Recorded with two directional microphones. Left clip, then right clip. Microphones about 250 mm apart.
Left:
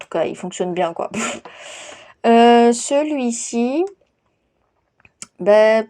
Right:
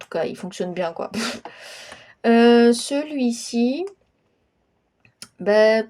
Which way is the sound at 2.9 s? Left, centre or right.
Centre.